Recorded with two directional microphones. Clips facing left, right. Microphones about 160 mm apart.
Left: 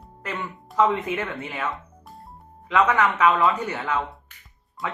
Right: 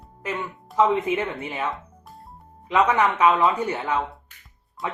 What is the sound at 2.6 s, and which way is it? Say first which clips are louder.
Speech: right 1 dB; 30° right (ahead or behind).